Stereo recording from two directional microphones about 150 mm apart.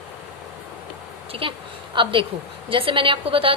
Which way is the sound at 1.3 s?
35° right (ahead or behind).